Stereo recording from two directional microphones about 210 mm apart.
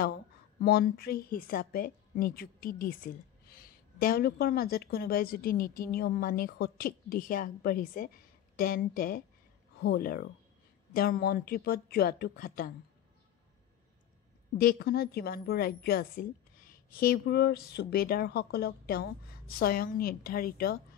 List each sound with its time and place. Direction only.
0.6 s a woman's voice: 45° left (ahead or behind)
14.6 s a woman's voice: 45° left (ahead or behind)